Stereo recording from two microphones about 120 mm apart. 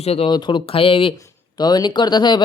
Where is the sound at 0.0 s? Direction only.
55° left (ahead or behind).